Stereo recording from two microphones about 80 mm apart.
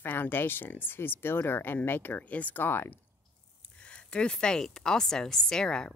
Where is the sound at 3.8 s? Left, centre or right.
Centre.